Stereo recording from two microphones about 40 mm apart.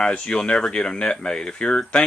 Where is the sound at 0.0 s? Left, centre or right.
Left.